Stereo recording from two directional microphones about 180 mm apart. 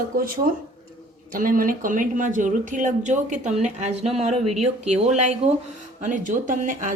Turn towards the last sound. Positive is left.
turn(degrees=-45)  # may be behind; listen again after turning